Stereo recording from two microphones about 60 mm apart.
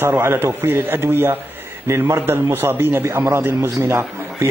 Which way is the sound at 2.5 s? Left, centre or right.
Right.